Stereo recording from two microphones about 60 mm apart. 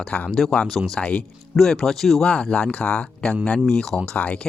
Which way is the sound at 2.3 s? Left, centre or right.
Centre.